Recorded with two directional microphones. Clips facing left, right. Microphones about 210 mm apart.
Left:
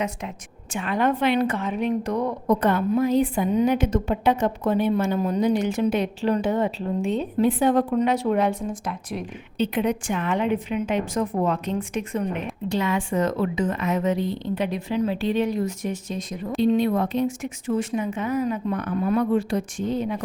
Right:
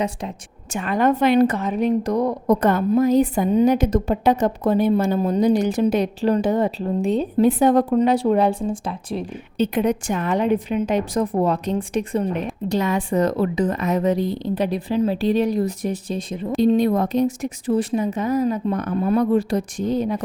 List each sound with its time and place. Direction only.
0.7 s a woman's voice: 45° right (ahead or behind)
9.6 s a woman's voice: 45° right (ahead or behind)
16.6 s a woman's voice: 40° right (ahead or behind)